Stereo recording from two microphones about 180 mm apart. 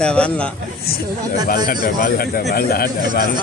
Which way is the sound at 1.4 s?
55° left (ahead or behind).